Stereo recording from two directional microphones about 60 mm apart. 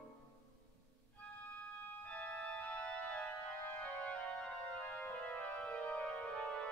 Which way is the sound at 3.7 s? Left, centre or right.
Left.